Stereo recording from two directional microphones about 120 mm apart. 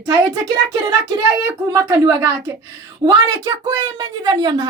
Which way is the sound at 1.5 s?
25° right (ahead or behind).